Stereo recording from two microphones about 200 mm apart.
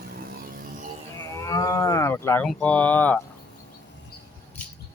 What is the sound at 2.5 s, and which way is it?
Speech, 5° left (ahead or behind).